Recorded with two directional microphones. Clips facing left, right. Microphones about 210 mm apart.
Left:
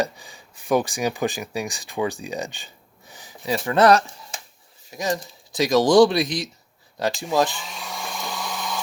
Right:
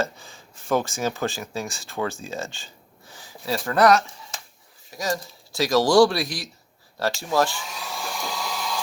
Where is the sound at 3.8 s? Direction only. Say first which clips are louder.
Left 2 dB; 30° left (ahead or behind).